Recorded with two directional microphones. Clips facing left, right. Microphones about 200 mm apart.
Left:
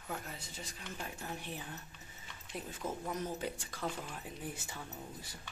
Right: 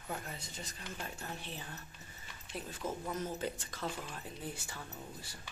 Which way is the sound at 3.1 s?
15° left (ahead or behind).